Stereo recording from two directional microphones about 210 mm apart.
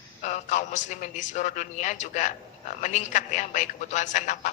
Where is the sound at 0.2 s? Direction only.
35° left (ahead or behind).